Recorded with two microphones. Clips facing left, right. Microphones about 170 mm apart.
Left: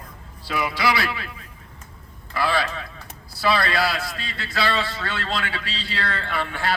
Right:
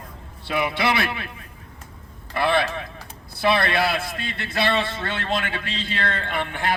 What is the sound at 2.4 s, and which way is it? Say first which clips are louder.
A man's voice: right 2 dB; 25° right (ahead or behind).